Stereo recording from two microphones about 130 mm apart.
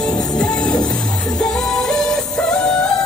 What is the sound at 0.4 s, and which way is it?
Music, 5° left (ahead or behind).